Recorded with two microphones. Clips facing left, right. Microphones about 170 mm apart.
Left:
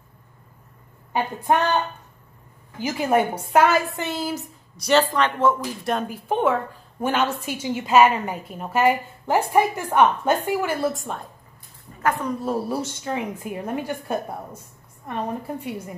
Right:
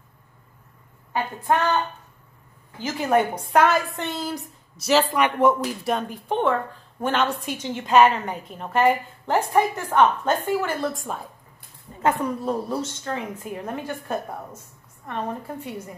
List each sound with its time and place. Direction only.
1.5 s a woman's voice: 20° left (ahead or behind)
2.8 s a woman's voice: 10° left (ahead or behind); by 5.6 s 15° right (ahead or behind)
5.9 s a woman's voice: 5° left (ahead or behind)
12.0 s a woman's voice: 15° right (ahead or behind)
12.4 s a woman's voice: 5° left (ahead or behind)